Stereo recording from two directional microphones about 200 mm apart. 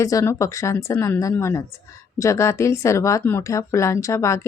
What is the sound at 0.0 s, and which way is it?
Speech, 15° left (ahead or behind).